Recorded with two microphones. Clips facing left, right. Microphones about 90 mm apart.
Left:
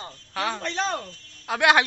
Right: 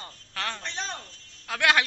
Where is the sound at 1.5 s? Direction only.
20° left (ahead or behind).